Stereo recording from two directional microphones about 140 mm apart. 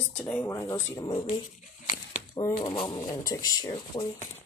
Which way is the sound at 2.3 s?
35° left (ahead or behind).